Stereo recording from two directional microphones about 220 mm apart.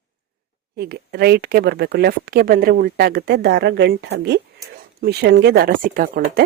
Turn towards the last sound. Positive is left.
turn(degrees=-40)  # may be behind; listen again after turning